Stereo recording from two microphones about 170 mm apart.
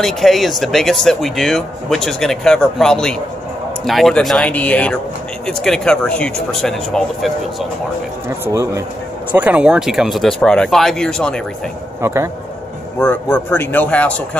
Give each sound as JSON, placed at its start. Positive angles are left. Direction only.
{"t": 0.0, "sound": "speech", "side_deg": 0}
{"t": 9.3, "sound": "speech", "side_deg": -10}
{"t": 12.0, "sound": "speech", "side_deg": -15}
{"t": 13.0, "sound": "speech", "side_deg": 10}